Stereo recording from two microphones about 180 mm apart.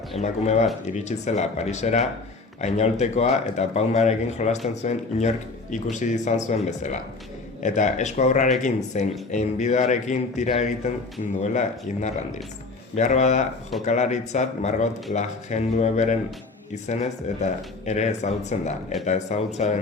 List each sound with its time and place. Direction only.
0.2 s speech: 40° left (ahead or behind)